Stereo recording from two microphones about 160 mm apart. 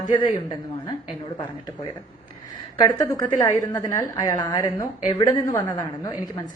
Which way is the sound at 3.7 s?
20° left (ahead or behind).